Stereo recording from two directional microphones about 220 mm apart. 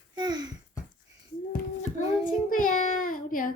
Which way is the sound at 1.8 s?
35° left (ahead or behind).